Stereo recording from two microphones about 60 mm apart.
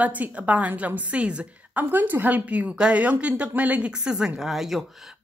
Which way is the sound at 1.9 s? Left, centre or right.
Right.